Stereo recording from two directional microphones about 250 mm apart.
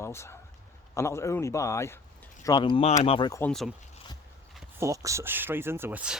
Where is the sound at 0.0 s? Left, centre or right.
Centre.